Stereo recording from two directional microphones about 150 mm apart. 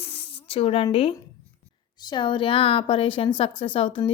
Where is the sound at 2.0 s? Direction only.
30° left (ahead or behind).